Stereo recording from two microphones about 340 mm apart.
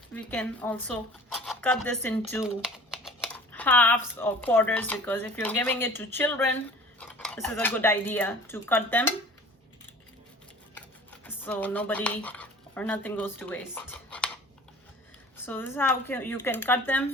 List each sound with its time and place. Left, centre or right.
0.1 s speech: centre
11.3 s speech: centre
15.4 s speech: centre